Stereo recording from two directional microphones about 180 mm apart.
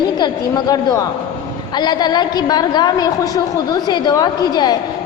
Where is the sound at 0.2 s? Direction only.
20° left (ahead or behind).